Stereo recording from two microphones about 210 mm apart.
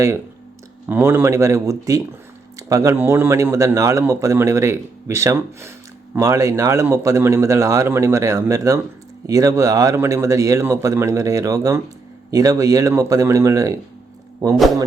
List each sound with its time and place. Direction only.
0.9 s speech: 10° right (ahead or behind)